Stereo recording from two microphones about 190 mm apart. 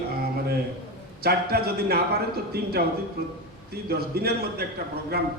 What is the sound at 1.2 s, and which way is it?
A man's voice, 55° right (ahead or behind).